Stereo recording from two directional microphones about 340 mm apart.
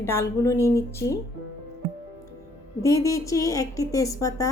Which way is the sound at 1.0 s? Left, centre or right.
Left.